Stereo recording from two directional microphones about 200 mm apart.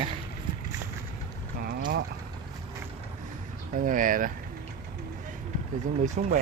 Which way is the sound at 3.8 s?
45° right (ahead or behind).